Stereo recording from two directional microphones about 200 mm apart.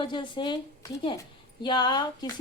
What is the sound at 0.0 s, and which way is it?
Speech, 25° left (ahead or behind).